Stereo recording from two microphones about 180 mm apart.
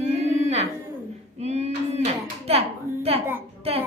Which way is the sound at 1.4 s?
35° right (ahead or behind).